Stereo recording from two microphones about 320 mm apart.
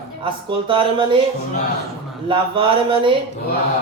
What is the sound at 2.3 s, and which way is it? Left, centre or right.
Speech, centre.